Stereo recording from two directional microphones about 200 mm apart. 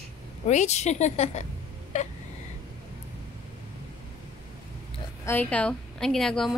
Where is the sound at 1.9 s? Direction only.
35° left (ahead or behind).